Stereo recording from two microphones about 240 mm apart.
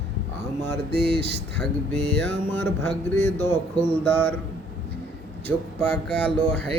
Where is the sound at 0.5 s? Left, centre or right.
Centre.